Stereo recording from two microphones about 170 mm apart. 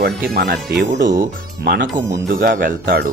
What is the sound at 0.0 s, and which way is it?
Speech, 70° right (ahead or behind).